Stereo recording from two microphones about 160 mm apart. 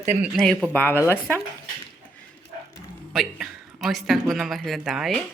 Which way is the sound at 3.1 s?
Centre (ahead or behind).